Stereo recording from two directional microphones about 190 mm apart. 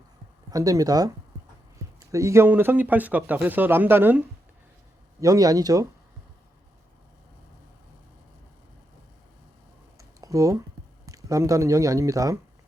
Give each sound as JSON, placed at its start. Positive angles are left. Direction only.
{"t": 0.5, "sound": "speech", "side_deg": -20}
{"t": 5.2, "sound": "speech", "side_deg": -20}
{"t": 10.0, "sound": "a sound", "side_deg": -15}
{"t": 11.0, "sound": "speech", "side_deg": -15}